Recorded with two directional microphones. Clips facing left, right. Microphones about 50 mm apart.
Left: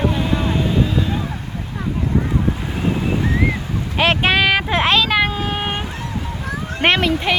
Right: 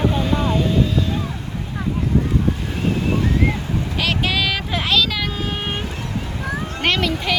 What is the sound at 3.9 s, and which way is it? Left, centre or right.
Vehicle, left.